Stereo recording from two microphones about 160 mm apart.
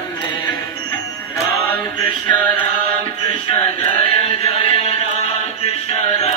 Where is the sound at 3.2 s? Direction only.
35° left (ahead or behind).